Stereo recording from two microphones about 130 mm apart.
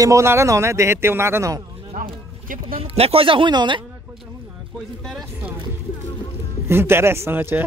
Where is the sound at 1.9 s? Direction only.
90° right.